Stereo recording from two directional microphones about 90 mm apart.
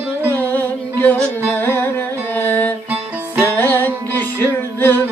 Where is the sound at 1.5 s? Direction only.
25° left (ahead or behind).